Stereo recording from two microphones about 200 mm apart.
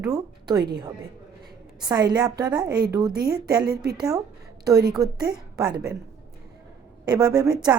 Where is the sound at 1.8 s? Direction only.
20° right (ahead or behind).